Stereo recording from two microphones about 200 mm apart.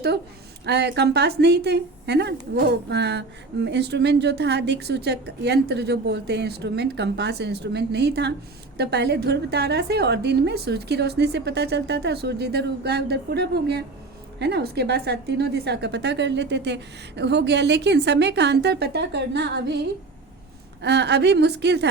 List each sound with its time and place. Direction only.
0.6 s a woman's voice: 55° right (ahead or behind)
20.8 s a woman's voice: 60° right (ahead or behind)